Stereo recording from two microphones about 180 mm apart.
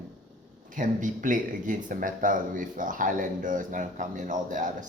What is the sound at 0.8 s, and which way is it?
Speech, 45° right (ahead or behind).